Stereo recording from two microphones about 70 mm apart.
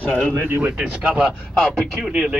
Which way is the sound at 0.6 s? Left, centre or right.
Right.